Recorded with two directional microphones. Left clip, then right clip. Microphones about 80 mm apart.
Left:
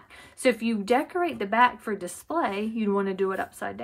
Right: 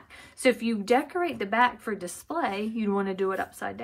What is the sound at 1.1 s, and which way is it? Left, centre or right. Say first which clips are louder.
Speech: left 1 dB; centre.